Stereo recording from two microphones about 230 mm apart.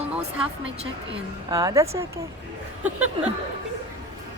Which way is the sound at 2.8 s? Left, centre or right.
Centre.